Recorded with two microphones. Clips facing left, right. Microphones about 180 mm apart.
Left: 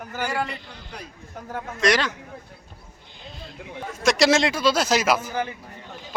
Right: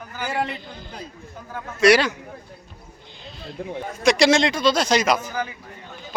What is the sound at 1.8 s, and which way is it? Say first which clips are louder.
Speech: right 6 dB; 10° right (ahead or behind).